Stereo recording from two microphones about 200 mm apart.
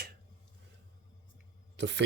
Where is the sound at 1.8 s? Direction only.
60° right (ahead or behind).